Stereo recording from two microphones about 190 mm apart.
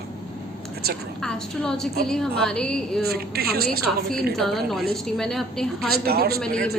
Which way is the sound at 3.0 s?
55° right (ahead or behind).